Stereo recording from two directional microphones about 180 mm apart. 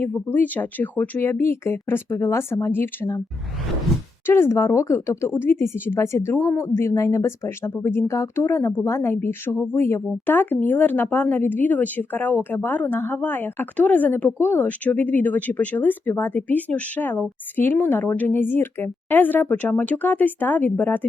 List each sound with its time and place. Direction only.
0.0 s speech: 10° left (ahead or behind)
4.3 s speech: 15° left (ahead or behind)